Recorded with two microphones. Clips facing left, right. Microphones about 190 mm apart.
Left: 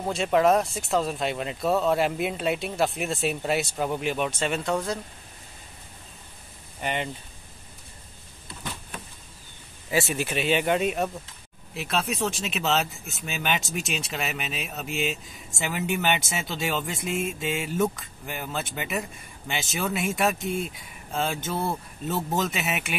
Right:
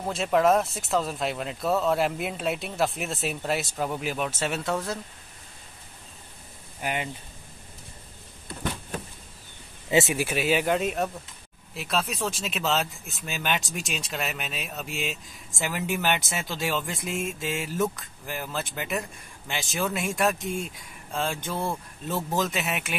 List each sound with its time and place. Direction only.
0.0 s speech: centre (ahead or behind)
6.8 s speech: 5° right (ahead or behind)
9.8 s speech: 20° right (ahead or behind)
10.1 s speech: 10° right (ahead or behind)